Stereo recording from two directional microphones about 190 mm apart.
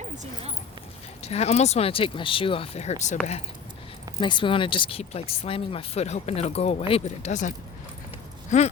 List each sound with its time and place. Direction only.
1.2 s speech: 35° left (ahead or behind)
4.2 s speech: 25° left (ahead or behind)